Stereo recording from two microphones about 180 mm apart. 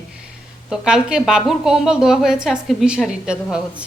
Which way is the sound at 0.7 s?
5° right (ahead or behind).